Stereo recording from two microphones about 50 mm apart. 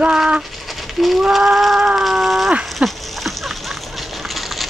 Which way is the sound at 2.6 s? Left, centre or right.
Centre.